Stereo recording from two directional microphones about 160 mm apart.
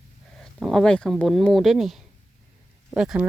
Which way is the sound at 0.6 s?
Centre (ahead or behind).